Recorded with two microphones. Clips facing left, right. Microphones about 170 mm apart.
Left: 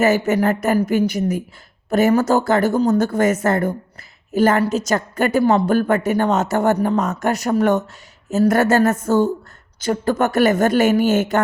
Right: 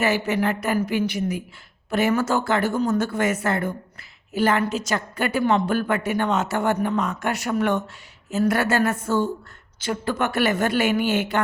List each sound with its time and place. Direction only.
0.0 s a woman's voice: 45° left (ahead or behind)